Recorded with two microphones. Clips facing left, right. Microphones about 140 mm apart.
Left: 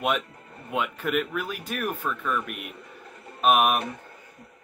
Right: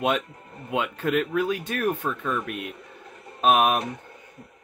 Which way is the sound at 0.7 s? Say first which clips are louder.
Right 2 dB; 25° right (ahead or behind).